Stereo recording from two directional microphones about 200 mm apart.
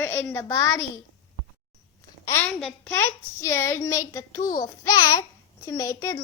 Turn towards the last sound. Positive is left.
turn(degrees=15)  # may be behind; listen again after turning